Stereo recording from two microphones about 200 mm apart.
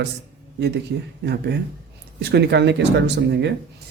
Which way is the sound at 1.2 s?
55° right (ahead or behind).